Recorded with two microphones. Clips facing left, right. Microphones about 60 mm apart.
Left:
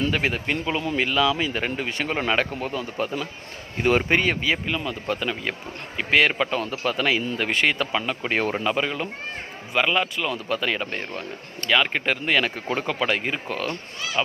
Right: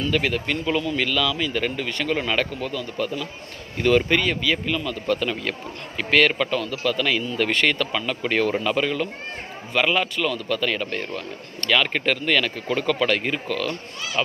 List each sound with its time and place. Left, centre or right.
0.1 s speech: left
7.5 s speech: centre
7.8 s speech: left
9.7 s speech: centre
10.2 s speech: left
12.4 s speech: left
13.5 s speech: left